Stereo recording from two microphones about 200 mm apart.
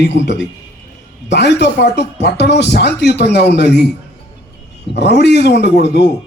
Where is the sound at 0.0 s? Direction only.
60° left (ahead or behind).